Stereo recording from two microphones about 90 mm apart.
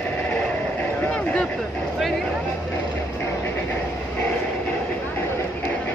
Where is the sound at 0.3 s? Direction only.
15° left (ahead or behind).